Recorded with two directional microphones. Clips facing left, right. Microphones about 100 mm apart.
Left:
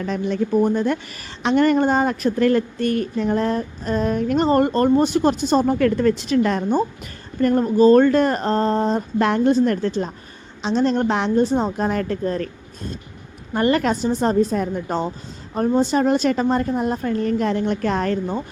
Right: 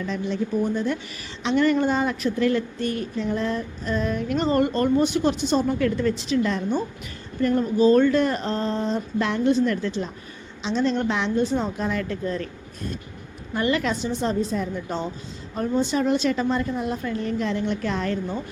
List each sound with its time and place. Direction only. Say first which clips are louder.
0.0 s speech: left 4 dB; 55° left (ahead or behind)
7.4 s speech: left 4 dB; 45° left (ahead or behind)
13.5 s speech: left 5 dB; 45° left (ahead or behind)